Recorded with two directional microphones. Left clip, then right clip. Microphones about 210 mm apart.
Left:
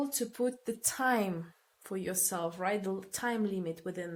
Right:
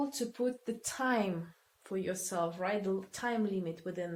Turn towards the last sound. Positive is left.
turn(degrees=45)  # may be behind; listen again after turning